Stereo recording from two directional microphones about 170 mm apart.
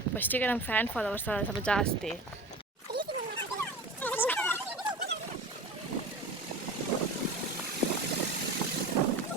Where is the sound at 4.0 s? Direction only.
10° left (ahead or behind).